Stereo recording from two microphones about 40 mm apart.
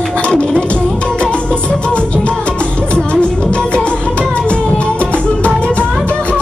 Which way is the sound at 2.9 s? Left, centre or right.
Left.